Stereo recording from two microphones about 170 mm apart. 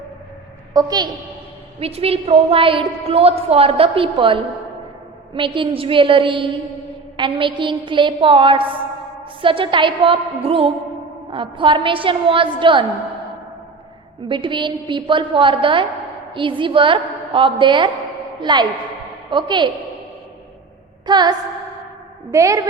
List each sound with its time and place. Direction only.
0.7 s a woman's voice: 25° right (ahead or behind)
1.8 s a woman's voice: 35° right (ahead or behind)
14.3 s a woman's voice: 30° right (ahead or behind)
21.1 s a woman's voice: 25° right (ahead or behind)